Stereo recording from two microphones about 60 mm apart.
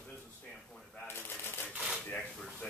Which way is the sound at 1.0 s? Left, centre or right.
Left.